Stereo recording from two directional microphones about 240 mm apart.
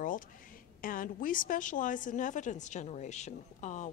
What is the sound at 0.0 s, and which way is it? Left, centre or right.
A woman's voice, left.